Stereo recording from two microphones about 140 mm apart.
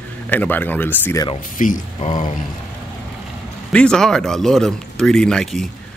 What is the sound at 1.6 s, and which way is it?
Speech, 70° left (ahead or behind).